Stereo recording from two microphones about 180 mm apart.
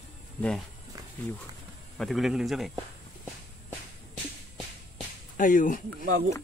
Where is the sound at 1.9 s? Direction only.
Centre (ahead or behind).